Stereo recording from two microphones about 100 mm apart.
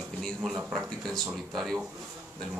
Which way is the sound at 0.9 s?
5° left (ahead or behind).